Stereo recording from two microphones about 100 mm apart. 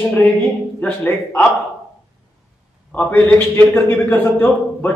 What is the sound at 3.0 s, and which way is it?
A man's voice, 20° left (ahead or behind).